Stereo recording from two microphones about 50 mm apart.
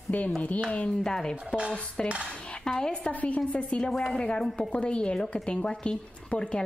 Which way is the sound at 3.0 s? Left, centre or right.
Left.